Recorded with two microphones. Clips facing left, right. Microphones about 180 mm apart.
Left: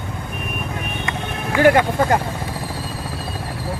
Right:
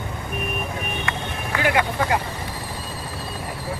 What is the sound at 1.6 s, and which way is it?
Speech, 45° left (ahead or behind).